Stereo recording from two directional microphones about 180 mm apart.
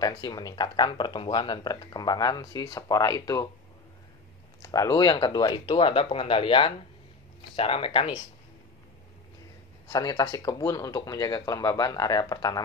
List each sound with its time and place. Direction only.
0.0 s speech: 20° left (ahead or behind)
4.6 s speech: 20° left (ahead or behind)
9.8 s speech: 20° left (ahead or behind)